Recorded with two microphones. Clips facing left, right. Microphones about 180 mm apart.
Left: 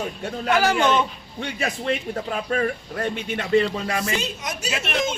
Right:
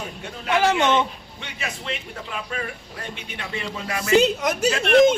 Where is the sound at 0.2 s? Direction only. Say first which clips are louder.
Left 5 dB; 45° left (ahead or behind).